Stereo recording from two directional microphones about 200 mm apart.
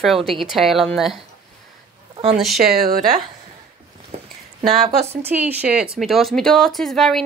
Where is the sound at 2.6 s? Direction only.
50° right (ahead or behind).